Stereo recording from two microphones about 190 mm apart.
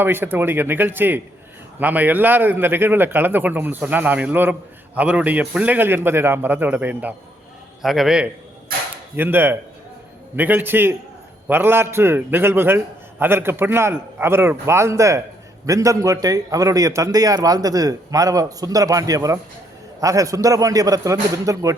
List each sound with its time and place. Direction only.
0.0 s a man's voice: 10° right (ahead or behind)